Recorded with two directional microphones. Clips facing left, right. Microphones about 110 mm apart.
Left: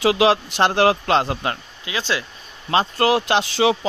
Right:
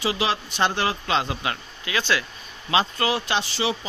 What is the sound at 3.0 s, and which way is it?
Speech, 80° left.